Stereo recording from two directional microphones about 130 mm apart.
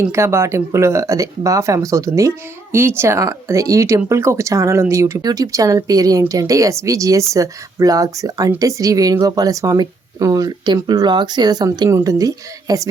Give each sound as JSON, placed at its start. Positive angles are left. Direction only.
{"t": 0.0, "sound": "speech", "side_deg": -20}